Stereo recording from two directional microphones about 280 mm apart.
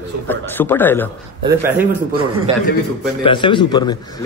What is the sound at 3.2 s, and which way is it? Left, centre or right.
Speech, centre.